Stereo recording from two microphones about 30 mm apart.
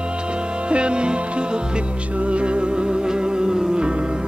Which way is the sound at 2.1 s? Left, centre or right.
Right.